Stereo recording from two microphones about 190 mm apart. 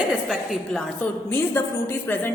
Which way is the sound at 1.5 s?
10° left (ahead or behind).